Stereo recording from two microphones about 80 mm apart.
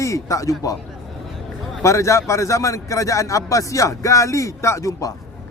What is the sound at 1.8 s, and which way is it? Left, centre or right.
A man's voice, left.